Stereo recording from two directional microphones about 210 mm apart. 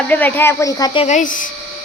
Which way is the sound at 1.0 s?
35° left (ahead or behind).